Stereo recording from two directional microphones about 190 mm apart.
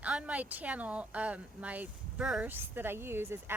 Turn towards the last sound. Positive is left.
turn(degrees=-10)  # may be behind; listen again after turning